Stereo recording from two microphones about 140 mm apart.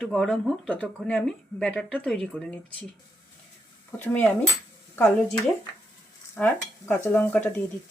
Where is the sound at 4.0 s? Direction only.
15° left (ahead or behind).